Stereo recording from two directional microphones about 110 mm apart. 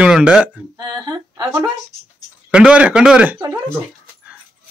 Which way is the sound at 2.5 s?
10° right (ahead or behind).